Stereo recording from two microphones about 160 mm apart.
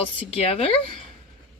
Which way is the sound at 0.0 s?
35° left (ahead or behind).